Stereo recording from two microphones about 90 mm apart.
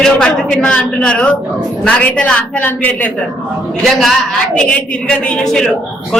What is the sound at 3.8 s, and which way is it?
A woman's voice, centre (ahead or behind).